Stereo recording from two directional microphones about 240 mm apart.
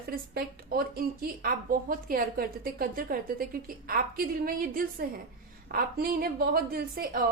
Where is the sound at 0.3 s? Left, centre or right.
Right.